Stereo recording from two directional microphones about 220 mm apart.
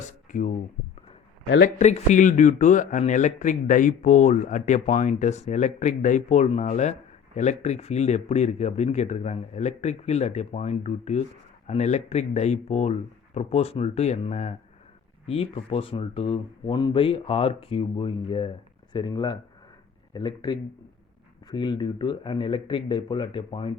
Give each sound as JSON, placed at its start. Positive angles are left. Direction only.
{"t": 0.3, "sound": "speech", "side_deg": 35}
{"t": 1.6, "sound": "a man's voice", "side_deg": 30}